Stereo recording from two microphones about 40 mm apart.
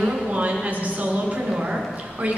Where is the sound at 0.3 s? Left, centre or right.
Right.